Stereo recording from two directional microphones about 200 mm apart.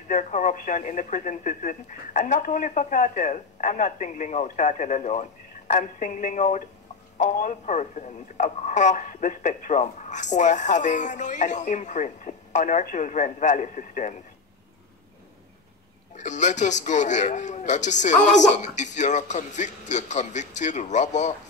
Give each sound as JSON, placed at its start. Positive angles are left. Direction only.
{"t": 0.1, "sound": "speech", "side_deg": 40}
{"t": 16.2, "sound": "speech", "side_deg": 35}